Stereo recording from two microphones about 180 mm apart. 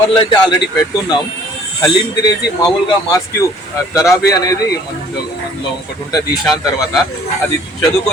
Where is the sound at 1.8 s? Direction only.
20° left (ahead or behind).